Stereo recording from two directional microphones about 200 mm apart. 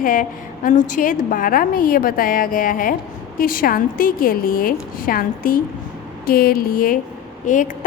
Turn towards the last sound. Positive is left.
turn(degrees=40)  # may be behind; listen again after turning